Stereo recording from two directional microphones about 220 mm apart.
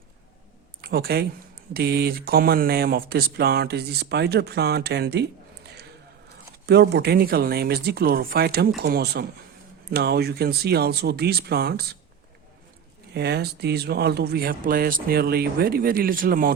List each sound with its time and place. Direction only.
0.8 s speech: 45° right (ahead or behind)
6.7 s speech: 50° right (ahead or behind)
13.1 s speech: 50° right (ahead or behind)